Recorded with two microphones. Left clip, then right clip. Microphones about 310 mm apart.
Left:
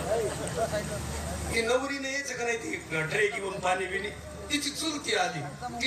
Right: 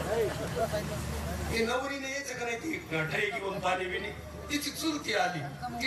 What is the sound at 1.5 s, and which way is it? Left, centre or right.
A man's voice, left.